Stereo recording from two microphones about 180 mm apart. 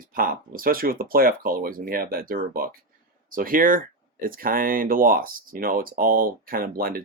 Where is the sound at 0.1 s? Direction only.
50° right (ahead or behind).